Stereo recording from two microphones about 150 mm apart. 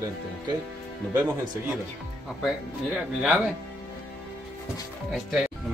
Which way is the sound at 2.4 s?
5° right (ahead or behind).